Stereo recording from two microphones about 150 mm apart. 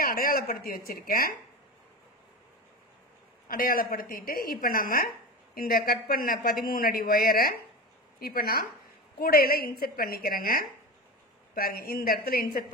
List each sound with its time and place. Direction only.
0.0 s speech: 75° left (ahead or behind)
3.4 s a woman's voice: 70° left (ahead or behind); by 12.6 s 90° left